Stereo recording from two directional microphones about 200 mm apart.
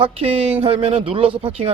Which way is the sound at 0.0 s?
30° right (ahead or behind).